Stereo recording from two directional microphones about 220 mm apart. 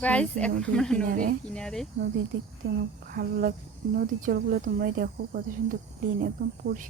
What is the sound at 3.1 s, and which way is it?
Speech, 45° right (ahead or behind).